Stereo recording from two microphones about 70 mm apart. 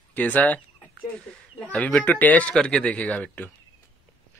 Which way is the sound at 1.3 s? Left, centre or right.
Centre.